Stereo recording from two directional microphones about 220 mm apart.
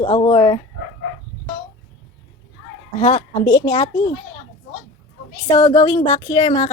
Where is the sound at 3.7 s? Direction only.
30° left (ahead or behind).